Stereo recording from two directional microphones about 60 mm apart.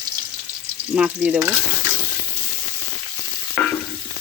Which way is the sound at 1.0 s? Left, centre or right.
Centre.